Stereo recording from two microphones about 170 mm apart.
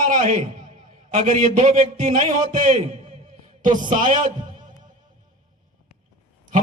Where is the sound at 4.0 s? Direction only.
50° right (ahead or behind).